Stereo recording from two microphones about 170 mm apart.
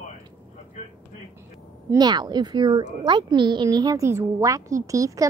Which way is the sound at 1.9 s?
25° right (ahead or behind).